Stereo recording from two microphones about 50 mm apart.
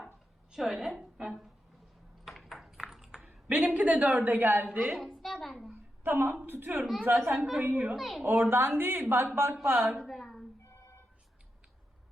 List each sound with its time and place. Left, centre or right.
0.5 s a sound: centre
2.2 s ping: centre
3.5 s a woman's voice: right
4.9 s a sound: centre
6.0 s speech: right
7.3 s a woman's voice: centre
8.2 s speech: right
9.9 s a woman's voice: centre